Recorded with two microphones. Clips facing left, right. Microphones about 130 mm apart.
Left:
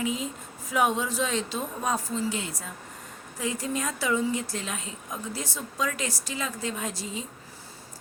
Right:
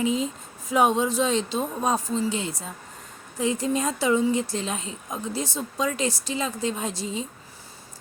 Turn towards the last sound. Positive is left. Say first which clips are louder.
# right 4 dB
turn(degrees=-25)  # may be behind; listen again after turning